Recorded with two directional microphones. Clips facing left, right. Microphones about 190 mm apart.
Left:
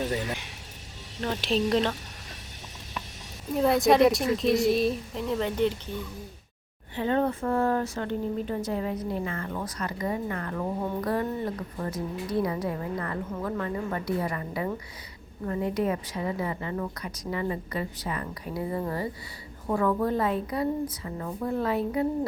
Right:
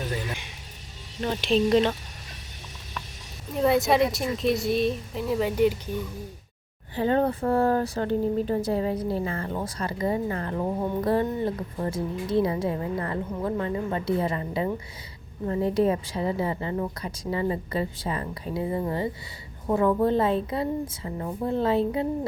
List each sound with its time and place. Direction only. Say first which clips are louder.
1.2 s speech: right 3 dB; centre (ahead or behind)
3.5 s speech: even; centre (ahead or behind)
6.9 s a woman's voice: right 3 dB; 35° right (ahead or behind)